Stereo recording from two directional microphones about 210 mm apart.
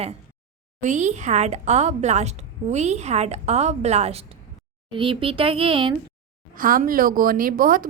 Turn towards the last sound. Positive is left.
turn(degrees=-40)  # may be behind; listen again after turning